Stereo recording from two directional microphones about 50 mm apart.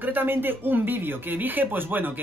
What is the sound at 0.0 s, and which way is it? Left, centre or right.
Speech, right.